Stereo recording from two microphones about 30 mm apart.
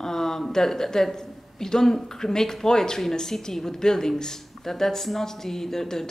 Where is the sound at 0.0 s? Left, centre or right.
Centre.